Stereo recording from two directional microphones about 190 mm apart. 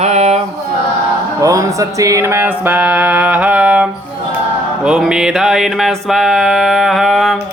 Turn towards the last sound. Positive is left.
turn(degrees=0)  # may be behind; listen again after turning